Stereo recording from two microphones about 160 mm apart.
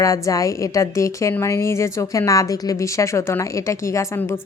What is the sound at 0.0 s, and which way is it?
A woman's voice, 20° left (ahead or behind).